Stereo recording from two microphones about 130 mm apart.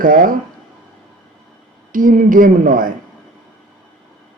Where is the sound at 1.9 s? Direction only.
90° right.